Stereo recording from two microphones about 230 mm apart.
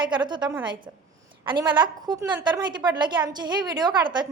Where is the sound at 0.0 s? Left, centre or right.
Centre.